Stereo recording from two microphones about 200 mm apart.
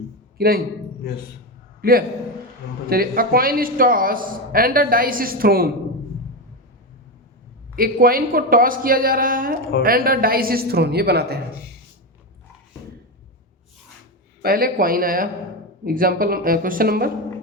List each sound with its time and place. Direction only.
0.3 s a man's voice: 50° right (ahead or behind)
1.8 s a man's voice: 50° right (ahead or behind)
7.8 s a man's voice: 45° right (ahead or behind)
14.4 s a man's voice: 50° right (ahead or behind)